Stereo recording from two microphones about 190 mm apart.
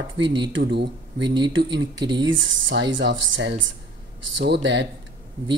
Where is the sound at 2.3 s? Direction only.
75° right (ahead or behind).